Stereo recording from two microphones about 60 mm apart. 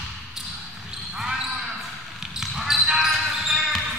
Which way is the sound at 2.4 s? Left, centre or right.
Centre.